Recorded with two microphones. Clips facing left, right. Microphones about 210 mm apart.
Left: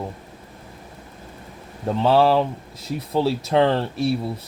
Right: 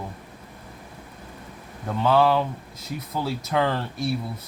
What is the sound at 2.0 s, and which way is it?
Speech, 30° left (ahead or behind).